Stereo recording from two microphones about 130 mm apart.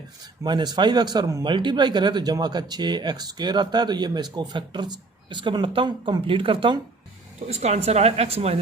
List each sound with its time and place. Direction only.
0.4 s speech: 35° right (ahead or behind)
7.5 s speech: 55° right (ahead or behind)